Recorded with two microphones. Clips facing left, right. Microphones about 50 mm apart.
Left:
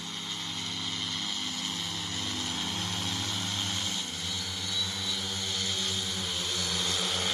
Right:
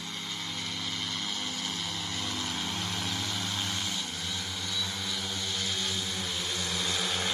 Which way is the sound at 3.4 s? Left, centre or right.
Centre.